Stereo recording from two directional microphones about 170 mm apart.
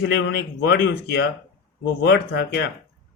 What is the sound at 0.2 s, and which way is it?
Speech, 80° left.